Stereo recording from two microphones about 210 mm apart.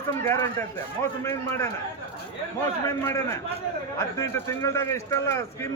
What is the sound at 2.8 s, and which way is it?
A man's voice, 15° left (ahead or behind).